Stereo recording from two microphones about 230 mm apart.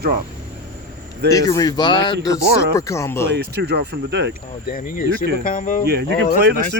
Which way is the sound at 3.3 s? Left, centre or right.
Right.